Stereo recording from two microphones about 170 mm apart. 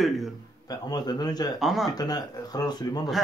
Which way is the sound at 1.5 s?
Centre (ahead or behind).